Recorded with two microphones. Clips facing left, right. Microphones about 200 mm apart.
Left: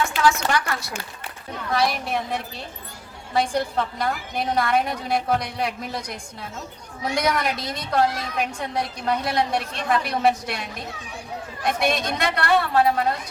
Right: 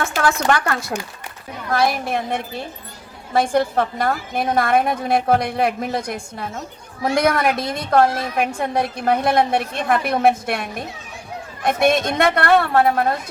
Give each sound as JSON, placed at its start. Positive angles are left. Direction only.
{"t": 0.0, "sound": "a woman's voice", "side_deg": -55}